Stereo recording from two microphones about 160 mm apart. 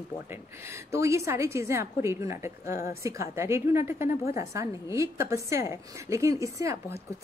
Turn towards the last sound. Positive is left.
turn(degrees=-20)  # may be behind; listen again after turning